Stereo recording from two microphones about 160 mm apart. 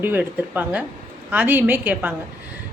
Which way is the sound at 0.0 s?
10° right (ahead or behind).